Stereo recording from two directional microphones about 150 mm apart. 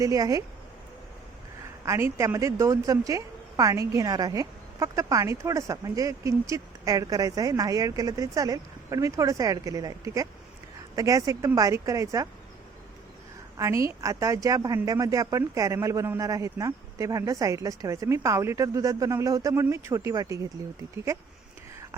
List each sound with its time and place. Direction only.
0.0 s speech: 20° right (ahead or behind)
1.8 s speech: 20° right (ahead or behind)
13.6 s speech: 20° right (ahead or behind)